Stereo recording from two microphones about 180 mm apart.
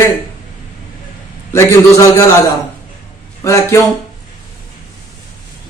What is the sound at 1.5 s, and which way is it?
A man's voice, 15° left (ahead or behind).